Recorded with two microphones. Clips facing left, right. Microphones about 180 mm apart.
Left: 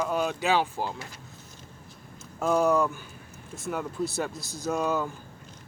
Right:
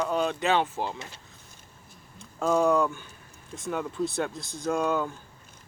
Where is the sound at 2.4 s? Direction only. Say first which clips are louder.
Even; 5° left (ahead or behind).